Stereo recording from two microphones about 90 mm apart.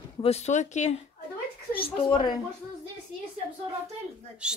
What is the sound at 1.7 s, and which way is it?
Speech, 75° left (ahead or behind).